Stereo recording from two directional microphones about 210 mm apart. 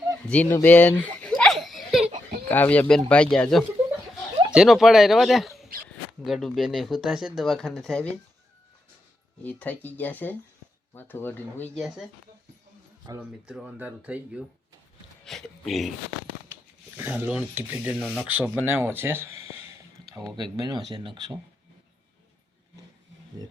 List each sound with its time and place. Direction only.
0.3 s a sound: 5° left (ahead or behind)
2.5 s speech: 10° left (ahead or behind)
9.4 s speech: 5° left (ahead or behind)
13.5 s speech: 5° right (ahead or behind)
17.0 s speech: 10° right (ahead or behind)
18.0 s speech: 5° left (ahead or behind)
18.3 s speech: 10° right (ahead or behind)